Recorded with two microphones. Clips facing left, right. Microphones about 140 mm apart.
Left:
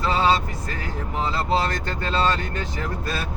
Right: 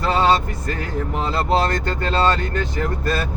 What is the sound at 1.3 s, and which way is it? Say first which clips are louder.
Speech: right 4 dB; 50° right (ahead or behind).